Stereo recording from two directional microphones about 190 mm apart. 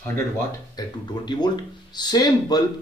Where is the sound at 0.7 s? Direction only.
20° left (ahead or behind).